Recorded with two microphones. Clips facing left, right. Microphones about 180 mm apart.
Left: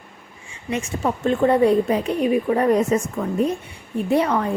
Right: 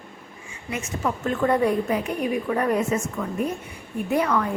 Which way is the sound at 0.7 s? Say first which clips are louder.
Left 4 dB; 30° left (ahead or behind).